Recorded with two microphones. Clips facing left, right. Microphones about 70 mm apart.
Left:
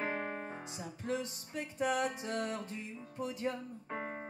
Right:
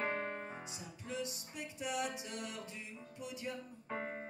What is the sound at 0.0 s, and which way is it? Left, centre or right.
Music, centre.